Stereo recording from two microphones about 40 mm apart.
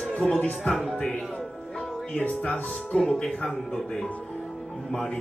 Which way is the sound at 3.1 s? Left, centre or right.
Left.